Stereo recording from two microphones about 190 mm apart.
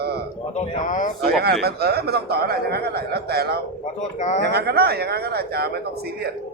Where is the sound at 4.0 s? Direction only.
40° left (ahead or behind).